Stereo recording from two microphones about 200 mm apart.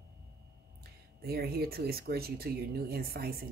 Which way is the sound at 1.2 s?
50° right (ahead or behind).